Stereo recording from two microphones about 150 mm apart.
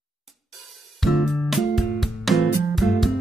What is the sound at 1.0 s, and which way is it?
Music, centre (ahead or behind).